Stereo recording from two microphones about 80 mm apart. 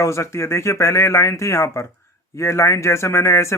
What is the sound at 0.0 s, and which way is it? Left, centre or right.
Speech, left.